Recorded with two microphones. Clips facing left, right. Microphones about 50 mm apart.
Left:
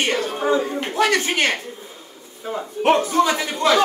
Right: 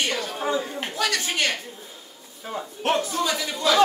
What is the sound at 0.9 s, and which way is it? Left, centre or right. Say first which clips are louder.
Speech: left 7 dB; left.